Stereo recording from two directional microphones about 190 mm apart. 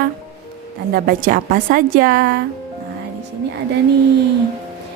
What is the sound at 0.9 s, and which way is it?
Speech, 50° right (ahead or behind).